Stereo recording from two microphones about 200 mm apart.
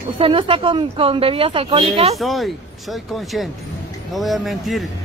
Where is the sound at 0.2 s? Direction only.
25° right (ahead or behind).